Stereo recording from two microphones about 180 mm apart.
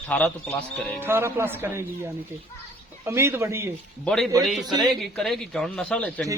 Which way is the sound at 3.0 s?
15° right (ahead or behind).